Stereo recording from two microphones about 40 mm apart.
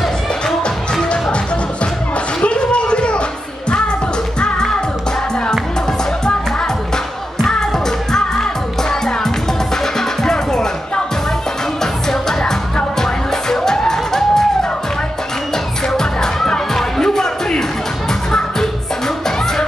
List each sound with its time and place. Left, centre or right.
0.0 s music: centre
2.4 s a sound: left
4.4 s music: left
7.7 s music: centre
9.9 s music: centre
11.8 s music: centre